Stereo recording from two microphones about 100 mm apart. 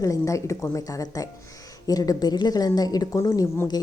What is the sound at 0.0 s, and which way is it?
Speech, 35° left (ahead or behind).